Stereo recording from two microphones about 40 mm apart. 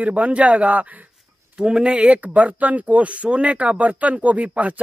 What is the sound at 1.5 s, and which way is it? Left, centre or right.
Speech, right.